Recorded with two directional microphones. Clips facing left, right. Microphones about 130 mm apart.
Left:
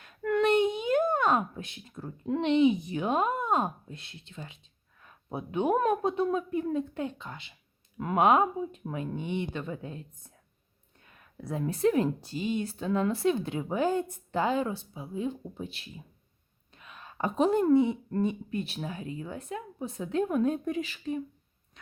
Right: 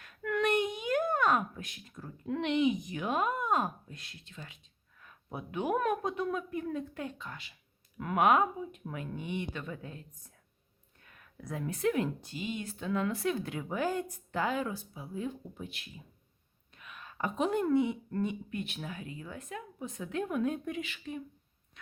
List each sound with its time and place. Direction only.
0.0 s a child's voice: 25° left (ahead or behind)